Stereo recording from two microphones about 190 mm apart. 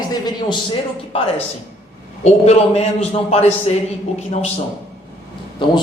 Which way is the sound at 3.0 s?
35° left (ahead or behind).